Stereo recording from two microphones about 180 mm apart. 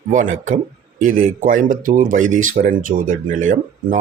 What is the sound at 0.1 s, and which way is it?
Speech, 45° right (ahead or behind).